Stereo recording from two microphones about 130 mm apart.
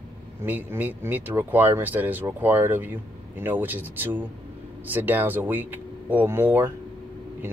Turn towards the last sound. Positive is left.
turn(degrees=-15)  # may be behind; listen again after turning